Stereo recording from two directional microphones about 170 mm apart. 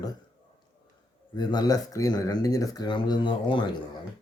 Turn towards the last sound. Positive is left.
turn(degrees=30)  # may be behind; listen again after turning